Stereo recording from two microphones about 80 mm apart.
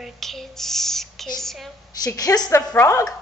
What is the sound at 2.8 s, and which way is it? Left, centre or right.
Speech, left.